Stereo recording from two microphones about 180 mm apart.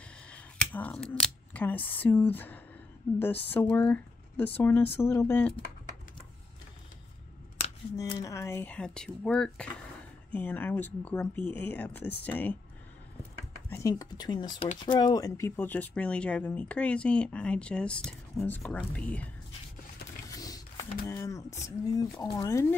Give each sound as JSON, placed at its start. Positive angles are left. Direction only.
{"t": 0.3, "sound": "speech", "side_deg": 10}
{"t": 7.9, "sound": "speech", "side_deg": 20}
{"t": 13.7, "sound": "speech", "side_deg": 15}
{"t": 20.2, "sound": "roaring cats", "side_deg": 20}
{"t": 21.1, "sound": "speech", "side_deg": 15}